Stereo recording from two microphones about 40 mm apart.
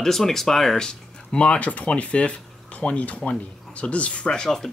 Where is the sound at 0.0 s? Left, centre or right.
Centre; by 4.3 s left.